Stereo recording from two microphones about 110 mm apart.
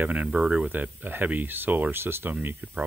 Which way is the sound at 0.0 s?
15° right (ahead or behind).